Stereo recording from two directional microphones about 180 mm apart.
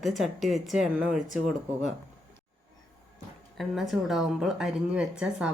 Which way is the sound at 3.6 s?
Centre (ahead or behind).